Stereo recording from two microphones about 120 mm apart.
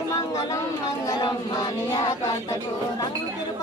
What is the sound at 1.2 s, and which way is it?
Music, 30° left (ahead or behind).